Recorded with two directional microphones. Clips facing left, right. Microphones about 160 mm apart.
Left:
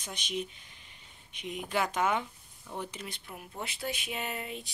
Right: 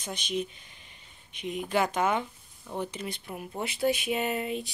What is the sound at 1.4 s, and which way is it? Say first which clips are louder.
Speech: right 4 dB; 5° left (ahead or behind).